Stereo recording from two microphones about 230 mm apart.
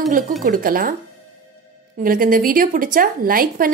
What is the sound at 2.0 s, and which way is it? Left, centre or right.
A woman's voice, right.